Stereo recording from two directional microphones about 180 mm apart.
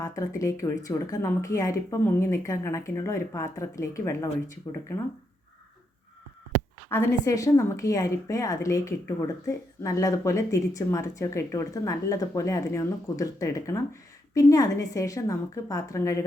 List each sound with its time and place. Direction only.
0.0 s a woman's voice: 15° left (ahead or behind)
6.9 s a woman's voice: 20° left (ahead or behind)